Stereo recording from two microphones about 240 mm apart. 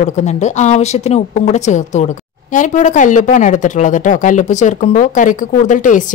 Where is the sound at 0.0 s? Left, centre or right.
Left.